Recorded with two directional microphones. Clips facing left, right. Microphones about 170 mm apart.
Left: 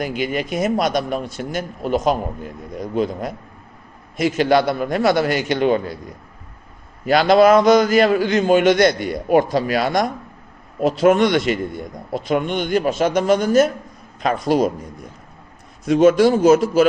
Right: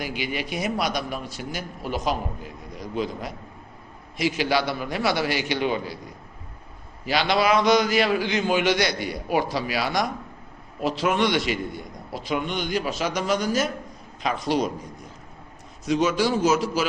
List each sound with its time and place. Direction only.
0.0 s a man's voice: 45° left (ahead or behind)
7.0 s a man's voice: 50° left (ahead or behind)
15.8 s speech: 55° left (ahead or behind)